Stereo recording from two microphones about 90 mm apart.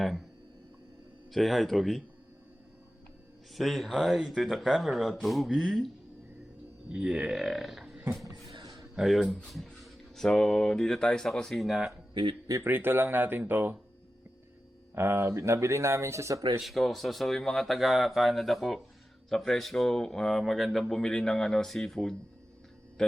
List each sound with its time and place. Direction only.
1.3 s speech: centre (ahead or behind)
3.5 s speech: centre (ahead or behind)
8.1 s a sound: centre (ahead or behind)
9.3 s speech: centre (ahead or behind)
12.1 s a man's voice: 65° right (ahead or behind)
12.6 s speech: 25° right (ahead or behind)
14.9 s speech: 30° right (ahead or behind)
16.6 s speech: centre (ahead or behind)